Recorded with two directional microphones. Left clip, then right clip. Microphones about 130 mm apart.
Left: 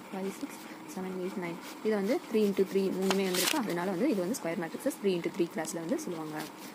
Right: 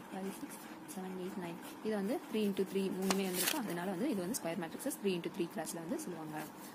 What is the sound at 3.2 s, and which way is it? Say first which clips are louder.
Speech: left 7 dB; 30° left (ahead or behind).